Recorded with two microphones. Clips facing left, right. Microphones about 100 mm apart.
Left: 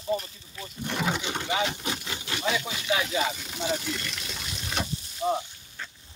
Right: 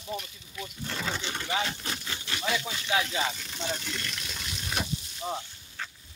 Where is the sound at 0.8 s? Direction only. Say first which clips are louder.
Left 6 dB; 15° left (ahead or behind); by 4.8 s centre (ahead or behind).